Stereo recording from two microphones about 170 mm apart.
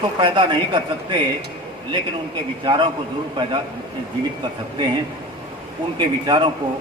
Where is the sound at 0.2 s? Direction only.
30° right (ahead or behind).